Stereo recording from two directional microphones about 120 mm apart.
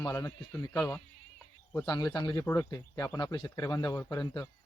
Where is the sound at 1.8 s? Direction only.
35° left (ahead or behind).